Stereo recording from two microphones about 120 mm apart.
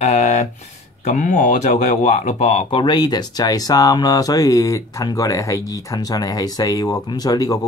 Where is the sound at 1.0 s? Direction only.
90° left; by 2.7 s 70° left (ahead or behind).